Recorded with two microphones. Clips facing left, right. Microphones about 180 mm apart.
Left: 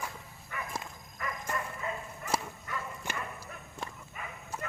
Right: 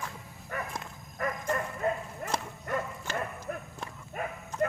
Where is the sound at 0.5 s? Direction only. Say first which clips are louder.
Right 4 dB; 45° right (ahead or behind).